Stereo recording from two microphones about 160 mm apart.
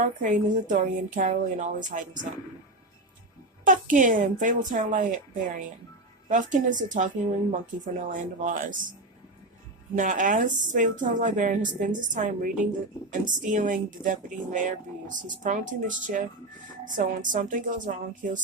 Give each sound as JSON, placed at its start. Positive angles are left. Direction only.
{"t": 0.0, "sound": "speech", "side_deg": -55}
{"t": 3.6, "sound": "speech", "side_deg": -55}
{"t": 8.1, "sound": "speech", "side_deg": -55}
{"t": 9.9, "sound": "speech", "side_deg": -55}